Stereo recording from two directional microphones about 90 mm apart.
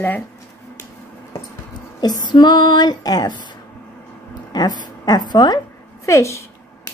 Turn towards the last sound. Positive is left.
turn(degrees=35)  # may be behind; listen again after turning